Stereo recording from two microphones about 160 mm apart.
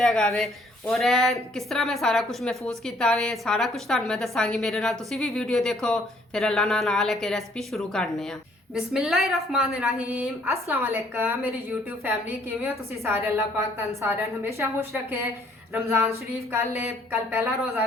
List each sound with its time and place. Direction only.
0.0 s a woman's voice: 5° left (ahead or behind); by 11.3 s 10° right (ahead or behind)
12.6 s a woman's voice: 15° right (ahead or behind)